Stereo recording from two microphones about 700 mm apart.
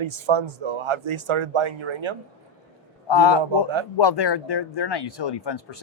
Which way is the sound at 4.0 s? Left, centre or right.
Left.